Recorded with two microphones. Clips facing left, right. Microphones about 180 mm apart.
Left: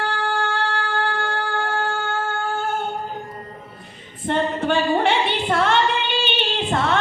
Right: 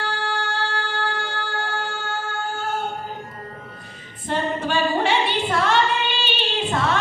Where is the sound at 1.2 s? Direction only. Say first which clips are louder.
Left 4 dB; 55° left (ahead or behind).